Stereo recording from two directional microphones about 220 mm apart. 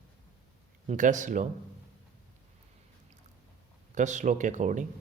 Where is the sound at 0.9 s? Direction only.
35° right (ahead or behind).